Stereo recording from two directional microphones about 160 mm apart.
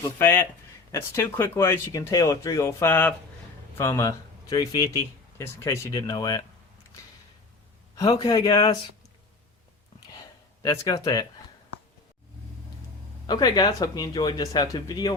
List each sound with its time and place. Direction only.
0.0 s speech: 15° left (ahead or behind)
7.9 s speech: 20° left (ahead or behind)
10.6 s speech: 20° left (ahead or behind)
13.2 s speech: 25° left (ahead or behind)